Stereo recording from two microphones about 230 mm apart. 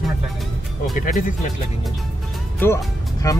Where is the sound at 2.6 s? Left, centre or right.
Centre.